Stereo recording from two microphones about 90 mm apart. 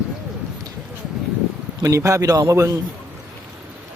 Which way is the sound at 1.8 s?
35° right (ahead or behind).